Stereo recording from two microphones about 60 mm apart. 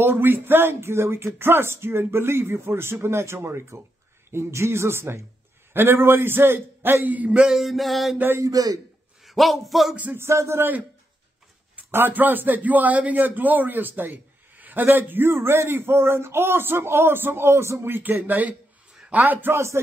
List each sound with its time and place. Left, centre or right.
0.0 s a man's voice: right; by 7.5 s centre
7.5 s music: centre
8.4 s a man's voice: right
9.2 s speech: centre
10.1 s speech: right
11.9 s a man's voice: right
18.9 s a sound: centre
19.2 s a man's voice: right
19.5 s speech: right